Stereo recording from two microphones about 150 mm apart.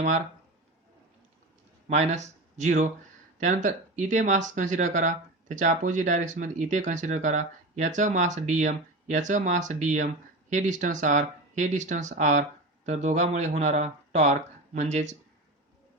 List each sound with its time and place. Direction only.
1.9 s speech: 50° right (ahead or behind)